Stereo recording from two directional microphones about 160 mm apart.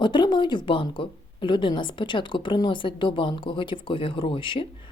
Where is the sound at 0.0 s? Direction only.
30° left (ahead or behind).